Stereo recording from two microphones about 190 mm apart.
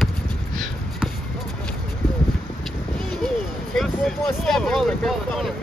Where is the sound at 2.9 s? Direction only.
Centre (ahead or behind).